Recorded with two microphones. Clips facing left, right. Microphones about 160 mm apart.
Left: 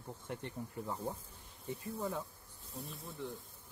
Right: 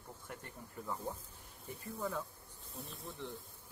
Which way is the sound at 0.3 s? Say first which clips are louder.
Left 8 dB; 25° left (ahead or behind).